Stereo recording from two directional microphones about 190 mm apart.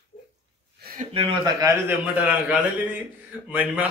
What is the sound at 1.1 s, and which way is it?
Speech, 25° right (ahead or behind).